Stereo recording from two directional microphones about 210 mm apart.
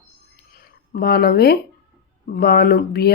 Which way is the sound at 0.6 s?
50° left (ahead or behind).